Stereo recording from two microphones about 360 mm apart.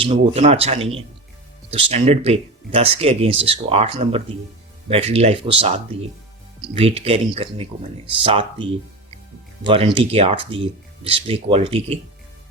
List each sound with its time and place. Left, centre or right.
0.0 s speech: centre
9.6 s speech: centre